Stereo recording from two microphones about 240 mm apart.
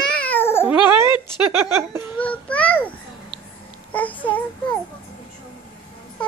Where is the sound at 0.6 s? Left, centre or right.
Centre.